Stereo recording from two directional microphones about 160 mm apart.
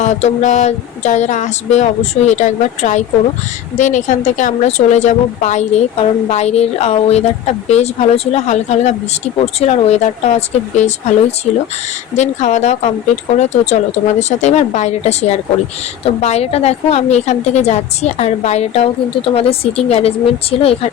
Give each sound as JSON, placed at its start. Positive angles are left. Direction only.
{"t": 0.0, "sound": "speech", "side_deg": 45}
{"t": 12.1, "sound": "a woman's voice", "side_deg": 50}